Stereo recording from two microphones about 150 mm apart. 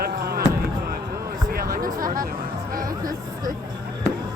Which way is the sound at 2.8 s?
25° right (ahead or behind).